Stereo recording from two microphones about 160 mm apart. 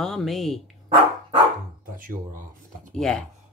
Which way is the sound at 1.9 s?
55° right (ahead or behind).